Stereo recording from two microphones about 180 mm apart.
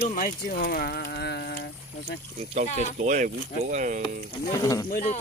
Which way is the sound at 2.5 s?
40° right (ahead or behind).